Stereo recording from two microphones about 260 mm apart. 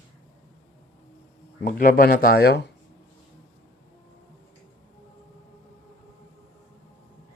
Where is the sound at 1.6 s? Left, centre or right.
Left.